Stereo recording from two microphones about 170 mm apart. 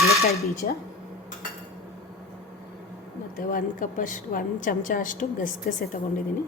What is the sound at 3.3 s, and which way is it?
A woman's voice, 55° left (ahead or behind).